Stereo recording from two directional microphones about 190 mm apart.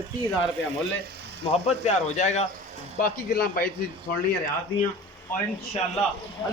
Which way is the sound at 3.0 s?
50° left (ahead or behind).